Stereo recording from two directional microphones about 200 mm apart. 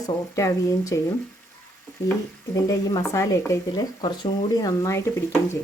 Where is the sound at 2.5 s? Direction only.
20° left (ahead or behind).